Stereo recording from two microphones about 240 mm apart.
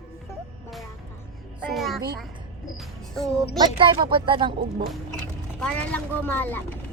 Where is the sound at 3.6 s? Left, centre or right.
Right.